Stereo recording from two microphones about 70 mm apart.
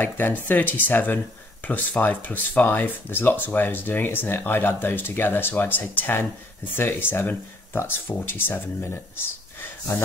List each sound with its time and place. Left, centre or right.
0.0 s speech: left